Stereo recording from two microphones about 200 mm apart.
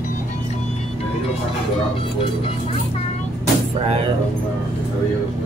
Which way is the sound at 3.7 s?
30° right (ahead or behind).